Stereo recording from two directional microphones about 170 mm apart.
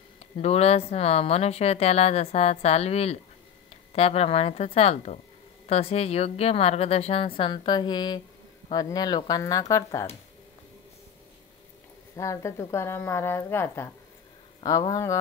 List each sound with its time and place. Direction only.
0.2 s speech: 40° left (ahead or behind); by 10.0 s 20° left (ahead or behind)
12.2 s a woman's voice: 20° left (ahead or behind)